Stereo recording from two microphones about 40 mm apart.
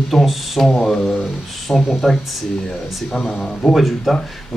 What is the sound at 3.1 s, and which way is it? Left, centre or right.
Speech, centre.